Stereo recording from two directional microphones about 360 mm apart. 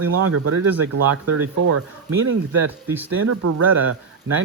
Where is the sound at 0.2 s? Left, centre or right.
Right.